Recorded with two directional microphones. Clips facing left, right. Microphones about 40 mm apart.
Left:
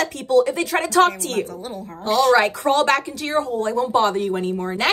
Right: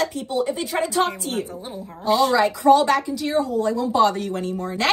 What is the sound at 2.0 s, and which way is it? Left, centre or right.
A woman's voice, left.